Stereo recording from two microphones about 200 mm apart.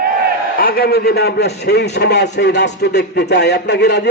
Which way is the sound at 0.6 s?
50° left (ahead or behind).